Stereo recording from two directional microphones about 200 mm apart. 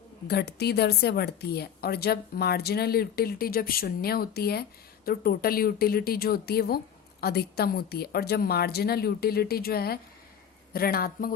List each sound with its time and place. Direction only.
0.3 s speech: 55° left (ahead or behind)